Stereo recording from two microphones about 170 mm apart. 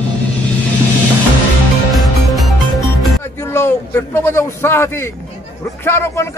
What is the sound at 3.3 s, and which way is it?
A man's voice, 15° left (ahead or behind).